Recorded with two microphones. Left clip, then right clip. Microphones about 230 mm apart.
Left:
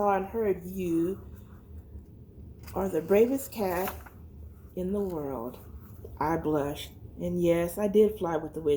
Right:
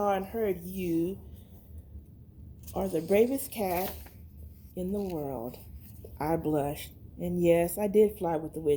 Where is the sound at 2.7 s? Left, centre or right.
Right.